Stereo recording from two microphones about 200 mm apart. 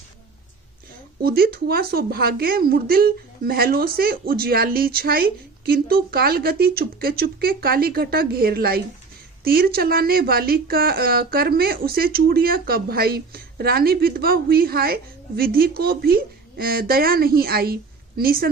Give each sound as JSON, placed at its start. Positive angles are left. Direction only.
{"t": 1.2, "sound": "speech", "side_deg": -50}